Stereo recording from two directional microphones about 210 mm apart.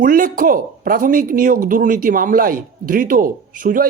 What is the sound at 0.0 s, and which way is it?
A man's voice, 40° right (ahead or behind).